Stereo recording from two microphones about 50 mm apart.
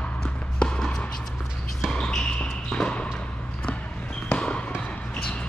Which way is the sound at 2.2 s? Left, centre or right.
Centre.